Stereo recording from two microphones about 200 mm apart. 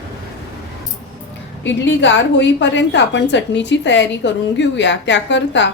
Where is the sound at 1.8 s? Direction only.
65° left (ahead or behind).